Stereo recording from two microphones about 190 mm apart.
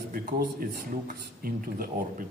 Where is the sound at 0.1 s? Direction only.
50° right (ahead or behind).